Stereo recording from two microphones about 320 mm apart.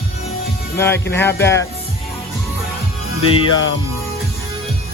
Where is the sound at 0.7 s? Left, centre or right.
Centre.